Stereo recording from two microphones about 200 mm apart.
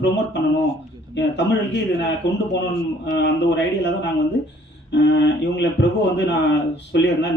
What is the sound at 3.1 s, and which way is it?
Speech, 60° left (ahead or behind).